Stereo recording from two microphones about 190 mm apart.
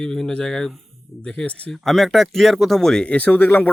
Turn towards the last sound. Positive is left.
turn(degrees=10)  # may be behind; listen again after turning